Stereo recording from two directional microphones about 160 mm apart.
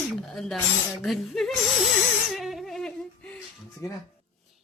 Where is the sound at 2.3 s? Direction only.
Centre (ahead or behind).